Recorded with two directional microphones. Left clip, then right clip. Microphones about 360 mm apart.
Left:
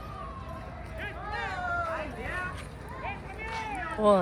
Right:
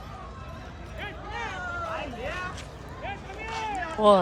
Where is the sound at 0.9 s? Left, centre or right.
Right.